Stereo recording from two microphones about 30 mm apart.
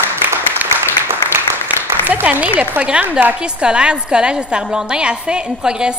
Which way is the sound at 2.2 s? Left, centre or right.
Right.